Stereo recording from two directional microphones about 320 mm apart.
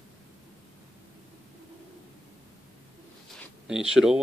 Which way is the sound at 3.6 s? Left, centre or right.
Centre.